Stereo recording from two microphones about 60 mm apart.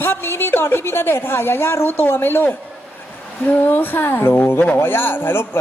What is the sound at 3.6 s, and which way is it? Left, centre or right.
A man's voice, left.